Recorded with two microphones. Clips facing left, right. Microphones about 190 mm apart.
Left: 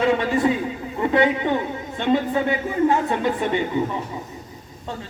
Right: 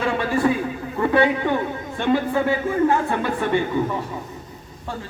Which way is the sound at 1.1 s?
20° left (ahead or behind).